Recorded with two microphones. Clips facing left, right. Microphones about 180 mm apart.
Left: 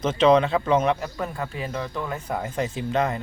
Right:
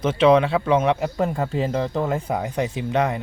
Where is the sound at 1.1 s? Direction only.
30° right (ahead or behind).